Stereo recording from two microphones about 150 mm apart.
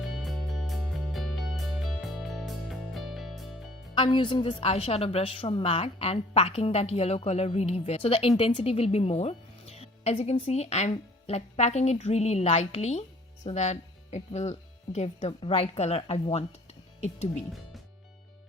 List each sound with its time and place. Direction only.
0.0 s music: centre (ahead or behind)
3.9 s a woman's voice: 35° left (ahead or behind)